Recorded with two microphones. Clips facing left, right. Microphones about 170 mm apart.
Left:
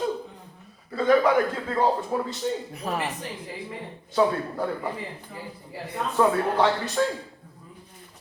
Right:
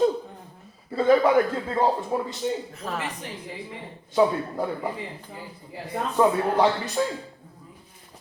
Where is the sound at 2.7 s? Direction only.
15° left (ahead or behind).